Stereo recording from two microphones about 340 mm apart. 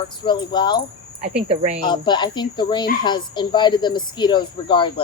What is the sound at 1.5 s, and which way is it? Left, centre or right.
Speech, centre.